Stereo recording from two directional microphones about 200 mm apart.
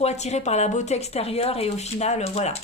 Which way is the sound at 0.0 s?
35° left (ahead or behind).